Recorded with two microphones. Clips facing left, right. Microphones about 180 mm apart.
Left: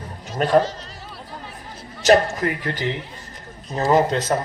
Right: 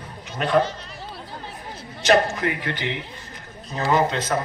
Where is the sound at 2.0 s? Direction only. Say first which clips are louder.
Left 3 dB; 40° left (ahead or behind).